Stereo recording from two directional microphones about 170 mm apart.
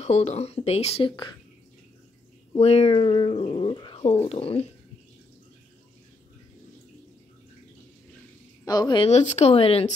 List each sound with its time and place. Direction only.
0.0 s speech: 40° left (ahead or behind)
2.6 s speech: 35° left (ahead or behind)
8.6 s speech: 25° left (ahead or behind)
9.1 s speech: 40° left (ahead or behind)